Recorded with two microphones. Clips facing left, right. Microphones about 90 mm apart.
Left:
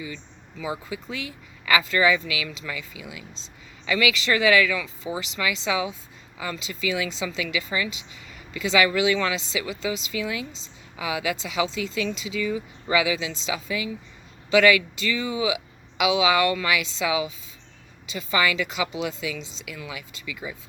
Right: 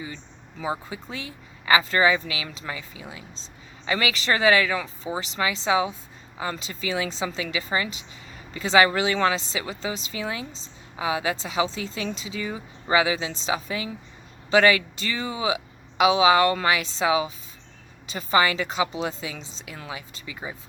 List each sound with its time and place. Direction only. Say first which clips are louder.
0.6 s a woman's voice: right 1 dB; 35° right (ahead or behind)